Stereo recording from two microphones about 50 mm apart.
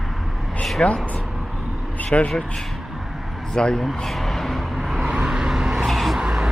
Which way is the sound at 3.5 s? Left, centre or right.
Centre.